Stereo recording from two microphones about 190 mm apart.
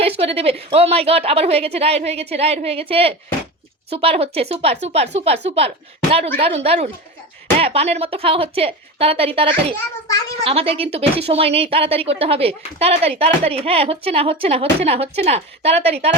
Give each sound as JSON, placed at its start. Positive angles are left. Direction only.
{"t": 0.0, "sound": "a woman's voice", "side_deg": -30}